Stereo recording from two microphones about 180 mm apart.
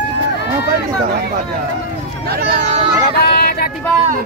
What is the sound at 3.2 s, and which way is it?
Vehicle, 55° left (ahead or behind).